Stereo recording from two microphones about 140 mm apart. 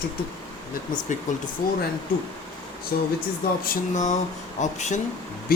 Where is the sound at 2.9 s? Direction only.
90° left.